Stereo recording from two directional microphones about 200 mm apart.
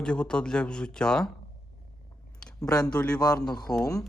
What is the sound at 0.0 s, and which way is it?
Speech, 5° left (ahead or behind).